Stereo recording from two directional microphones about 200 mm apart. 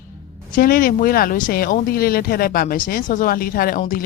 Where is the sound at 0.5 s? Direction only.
45° left (ahead or behind).